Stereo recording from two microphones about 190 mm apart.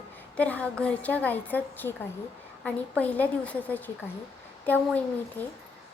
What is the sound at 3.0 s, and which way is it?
A woman's voice, 10° left (ahead or behind).